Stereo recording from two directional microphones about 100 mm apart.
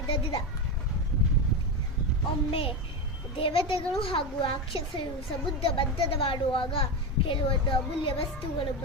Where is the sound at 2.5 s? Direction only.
65° left (ahead or behind).